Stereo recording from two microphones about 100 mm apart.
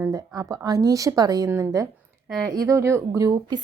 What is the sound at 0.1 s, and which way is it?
Speech, 35° right (ahead or behind).